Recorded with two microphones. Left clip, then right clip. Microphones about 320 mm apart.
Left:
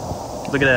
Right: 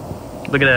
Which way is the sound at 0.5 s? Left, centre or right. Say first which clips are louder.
Right 3 dB; centre.